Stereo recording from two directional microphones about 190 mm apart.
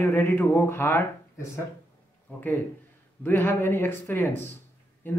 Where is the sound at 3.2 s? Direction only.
10° left (ahead or behind).